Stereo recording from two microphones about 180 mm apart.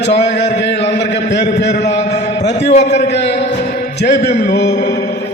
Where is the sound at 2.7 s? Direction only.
40° left (ahead or behind).